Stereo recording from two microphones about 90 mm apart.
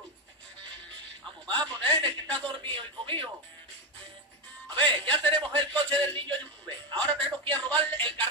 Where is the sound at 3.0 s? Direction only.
65° right (ahead or behind).